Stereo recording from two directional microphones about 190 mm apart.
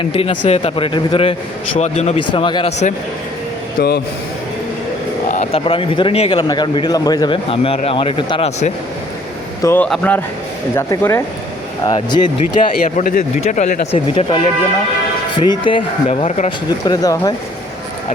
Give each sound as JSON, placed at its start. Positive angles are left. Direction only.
{"t": 0.0, "sound": "speech", "side_deg": 30}
{"t": 3.8, "sound": "a man's voice", "side_deg": 55}
{"t": 5.3, "sound": "speech", "side_deg": 35}
{"t": 9.6, "sound": "speech", "side_deg": 10}
{"t": 12.5, "sound": "speech", "side_deg": 45}
{"t": 16.6, "sound": "speech", "side_deg": 20}